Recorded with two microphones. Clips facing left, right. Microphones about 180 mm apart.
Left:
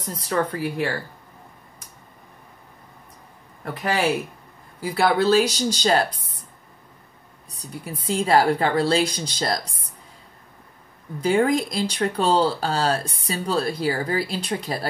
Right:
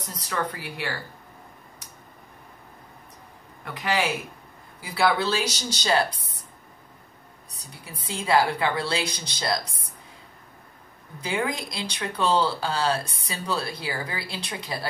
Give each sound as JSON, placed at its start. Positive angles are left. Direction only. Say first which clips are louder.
{"t": 0.3, "sound": "speech", "louder": "left 7 dB", "side_deg": 45}
{"t": 3.6, "sound": "speech", "louder": "left 4 dB", "side_deg": 40}
{"t": 7.8, "sound": "speech", "louder": "left 8 dB", "side_deg": 45}
{"t": 11.2, "sound": "speech", "louder": "left 9 dB", "side_deg": 45}